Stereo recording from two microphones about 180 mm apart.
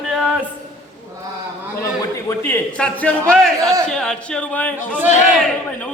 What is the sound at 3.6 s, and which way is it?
Speech, 20° right (ahead or behind).